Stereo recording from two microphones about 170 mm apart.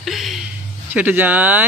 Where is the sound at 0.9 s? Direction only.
10° right (ahead or behind).